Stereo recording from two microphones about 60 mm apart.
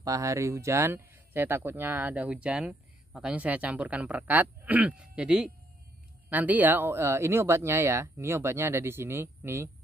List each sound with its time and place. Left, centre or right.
0.0 s speech: right